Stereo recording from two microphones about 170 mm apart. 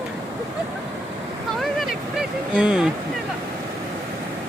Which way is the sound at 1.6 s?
Centre (ahead or behind).